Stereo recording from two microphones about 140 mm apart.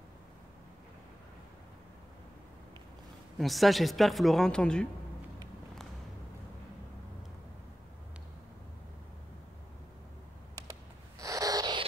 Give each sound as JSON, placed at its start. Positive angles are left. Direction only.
{"t": 3.3, "sound": "speech", "side_deg": 0}
{"t": 11.1, "sound": "owl", "side_deg": -25}